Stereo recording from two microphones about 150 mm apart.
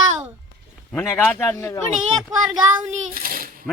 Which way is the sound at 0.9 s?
10° left (ahead or behind).